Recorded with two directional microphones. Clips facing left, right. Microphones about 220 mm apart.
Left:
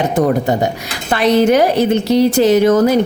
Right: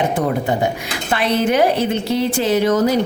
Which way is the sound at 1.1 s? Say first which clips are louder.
Left 6 dB; 40° left (ahead or behind).